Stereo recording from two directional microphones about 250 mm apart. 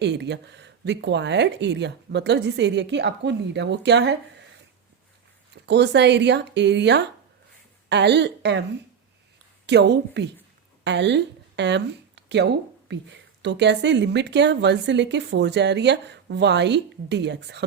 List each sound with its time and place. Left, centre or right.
0.0 s a woman's voice: right
5.6 s a woman's voice: right
9.6 s a woman's voice: right